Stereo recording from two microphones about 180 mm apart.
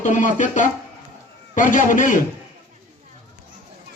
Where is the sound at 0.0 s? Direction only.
45° left (ahead or behind).